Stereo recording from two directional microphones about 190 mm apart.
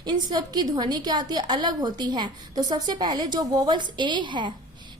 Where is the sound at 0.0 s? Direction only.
20° right (ahead or behind).